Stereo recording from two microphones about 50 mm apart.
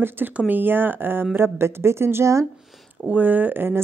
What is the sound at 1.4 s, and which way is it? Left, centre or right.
Speech, right.